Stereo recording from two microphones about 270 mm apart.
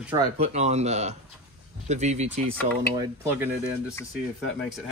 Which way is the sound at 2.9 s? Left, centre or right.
Centre.